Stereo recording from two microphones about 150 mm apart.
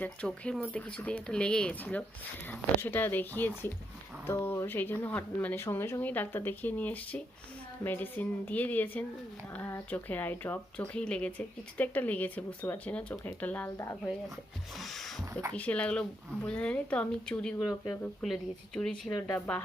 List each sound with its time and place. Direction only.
0.0 s a woman's voice: 5° left (ahead or behind)
14.8 s a sound: centre (ahead or behind)
15.2 s speech: 20° right (ahead or behind)
15.5 s speech: 10° left (ahead or behind)